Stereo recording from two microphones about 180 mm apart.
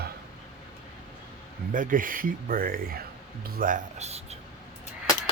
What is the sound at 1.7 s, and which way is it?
Speech, 50° right (ahead or behind).